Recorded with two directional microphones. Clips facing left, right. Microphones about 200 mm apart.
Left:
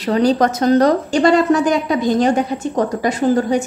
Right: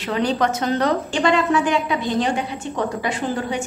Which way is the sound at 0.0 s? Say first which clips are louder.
Left 6 dB; 35° left (ahead or behind).